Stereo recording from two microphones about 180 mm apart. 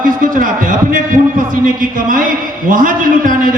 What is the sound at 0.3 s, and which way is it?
Speech, 50° right (ahead or behind).